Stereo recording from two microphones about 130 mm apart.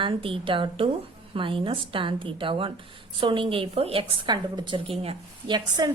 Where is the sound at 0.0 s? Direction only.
40° right (ahead or behind).